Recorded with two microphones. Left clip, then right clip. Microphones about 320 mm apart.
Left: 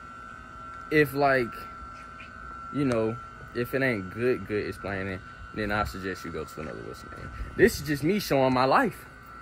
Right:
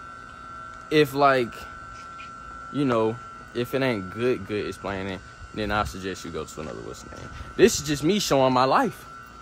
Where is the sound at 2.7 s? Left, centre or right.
Centre.